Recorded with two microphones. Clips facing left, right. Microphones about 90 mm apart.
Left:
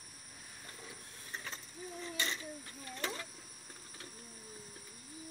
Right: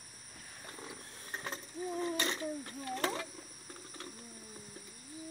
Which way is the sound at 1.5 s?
55° right (ahead or behind).